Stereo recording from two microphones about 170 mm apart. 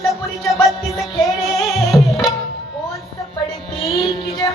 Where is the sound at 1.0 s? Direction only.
Centre (ahead or behind).